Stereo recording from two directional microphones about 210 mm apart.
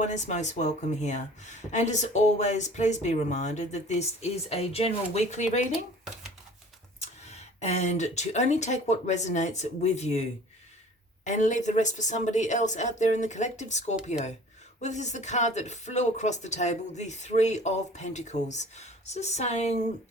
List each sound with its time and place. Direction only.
0.0 s speech: 35° left (ahead or behind)
7.3 s speech: 30° left (ahead or behind)